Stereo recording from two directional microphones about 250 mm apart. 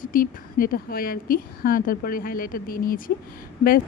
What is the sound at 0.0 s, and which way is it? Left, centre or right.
A woman's voice, left.